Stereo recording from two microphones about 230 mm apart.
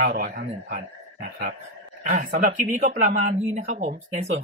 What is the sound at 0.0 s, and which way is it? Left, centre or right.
A man's voice, right.